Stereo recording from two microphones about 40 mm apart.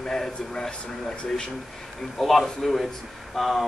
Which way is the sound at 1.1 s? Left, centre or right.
Left.